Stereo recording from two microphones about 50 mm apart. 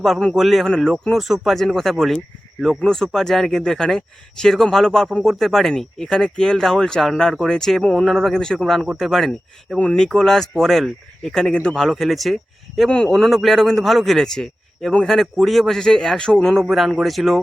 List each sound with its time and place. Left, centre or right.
0.3 s speech: centre
0.6 s speech: centre
1.1 s speech: centre
9.7 s speech: centre
10.2 s speech: centre
16.6 s speech: centre